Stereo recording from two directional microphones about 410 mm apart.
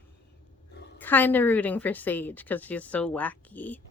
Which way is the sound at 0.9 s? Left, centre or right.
Centre.